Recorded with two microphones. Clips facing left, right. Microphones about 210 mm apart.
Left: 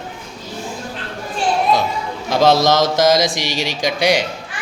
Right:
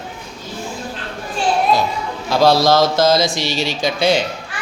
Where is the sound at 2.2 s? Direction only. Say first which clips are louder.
Even; 20° left (ahead or behind).